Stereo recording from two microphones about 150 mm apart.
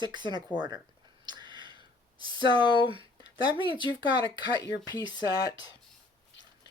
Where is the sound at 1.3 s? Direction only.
30° right (ahead or behind).